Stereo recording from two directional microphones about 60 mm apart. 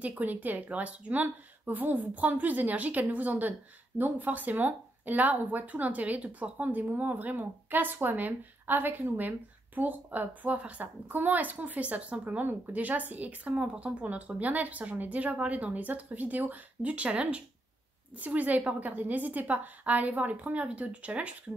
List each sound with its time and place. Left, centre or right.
0.0 s speech: right